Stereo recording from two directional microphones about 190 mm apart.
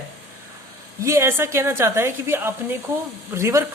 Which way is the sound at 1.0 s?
15° right (ahead or behind).